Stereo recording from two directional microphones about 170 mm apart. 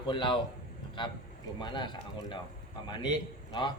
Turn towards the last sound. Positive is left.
turn(degrees=25)  # may be behind; listen again after turning